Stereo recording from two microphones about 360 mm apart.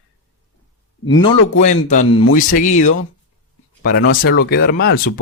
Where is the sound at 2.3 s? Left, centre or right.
Left.